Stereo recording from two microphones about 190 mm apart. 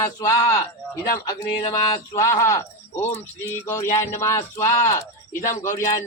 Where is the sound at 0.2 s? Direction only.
15° left (ahead or behind).